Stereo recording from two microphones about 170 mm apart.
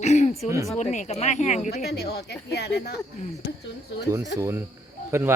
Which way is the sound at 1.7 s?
70° left (ahead or behind).